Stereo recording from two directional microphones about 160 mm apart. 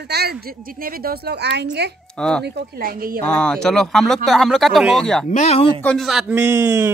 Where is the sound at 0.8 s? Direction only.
70° right (ahead or behind); by 1.6 s 90° right.